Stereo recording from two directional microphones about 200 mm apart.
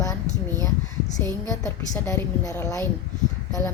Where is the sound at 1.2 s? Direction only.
15° left (ahead or behind).